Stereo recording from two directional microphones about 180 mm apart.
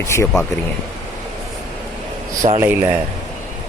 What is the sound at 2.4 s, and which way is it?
Speech, 35° right (ahead or behind).